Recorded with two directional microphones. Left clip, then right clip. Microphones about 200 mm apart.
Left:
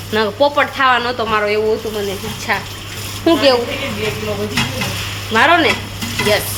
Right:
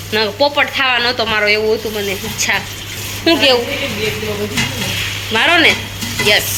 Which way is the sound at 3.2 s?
10° left (ahead or behind).